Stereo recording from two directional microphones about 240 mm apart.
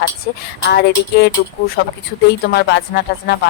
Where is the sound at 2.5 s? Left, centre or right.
Left.